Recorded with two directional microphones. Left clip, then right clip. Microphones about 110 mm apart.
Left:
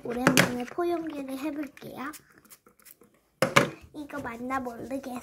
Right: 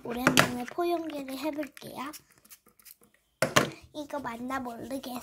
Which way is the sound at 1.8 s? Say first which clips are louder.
Left 1 dB; 35° right (ahead or behind).